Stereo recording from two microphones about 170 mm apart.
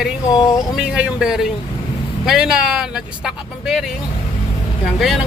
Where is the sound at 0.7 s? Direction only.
5° right (ahead or behind).